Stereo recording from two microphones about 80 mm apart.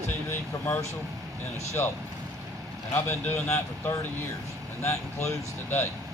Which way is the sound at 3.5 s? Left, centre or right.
Left.